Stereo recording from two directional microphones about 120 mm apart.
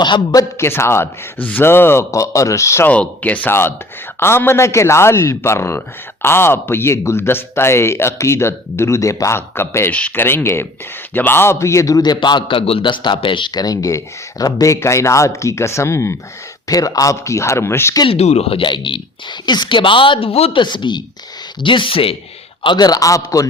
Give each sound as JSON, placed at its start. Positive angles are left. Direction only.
{"t": 0.0, "sound": "a man's voice", "side_deg": 40}
{"t": 0.5, "sound": "a man's voice", "side_deg": 20}
{"t": 2.9, "sound": "a man's voice", "side_deg": 10}
{"t": 18.0, "sound": "speech", "side_deg": 55}
{"t": 22.6, "sound": "a man's voice", "side_deg": 40}